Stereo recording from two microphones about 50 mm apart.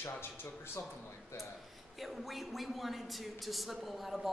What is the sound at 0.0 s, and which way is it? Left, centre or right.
Speech, left.